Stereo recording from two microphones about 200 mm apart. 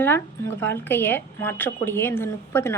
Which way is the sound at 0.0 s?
10° left (ahead or behind).